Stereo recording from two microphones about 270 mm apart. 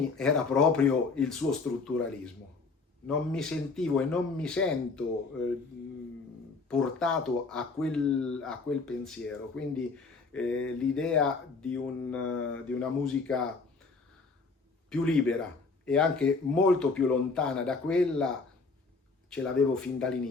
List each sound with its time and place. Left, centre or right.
0.2 s speech: centre
6.7 s speech: centre
12.3 s speech: left
12.6 s speech: centre
14.8 s speech: centre
19.3 s speech: centre